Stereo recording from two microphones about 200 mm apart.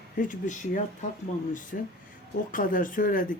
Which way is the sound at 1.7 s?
50° left (ahead or behind).